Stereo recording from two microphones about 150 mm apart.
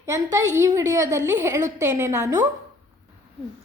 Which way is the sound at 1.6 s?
55° right (ahead or behind).